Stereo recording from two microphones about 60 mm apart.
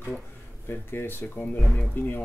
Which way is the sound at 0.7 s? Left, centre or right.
Left.